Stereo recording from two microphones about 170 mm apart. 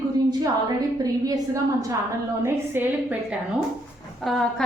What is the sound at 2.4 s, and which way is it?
Speech, 10° right (ahead or behind).